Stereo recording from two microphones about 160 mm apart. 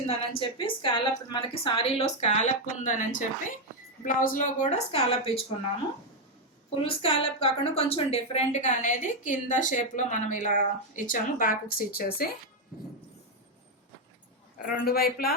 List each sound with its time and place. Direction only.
0.1 s a woman's voice: 35° left (ahead or behind)
6.8 s a woman's voice: 35° left (ahead or behind); by 12.3 s 70° left (ahead or behind)
14.7 s speech: 70° left (ahead or behind)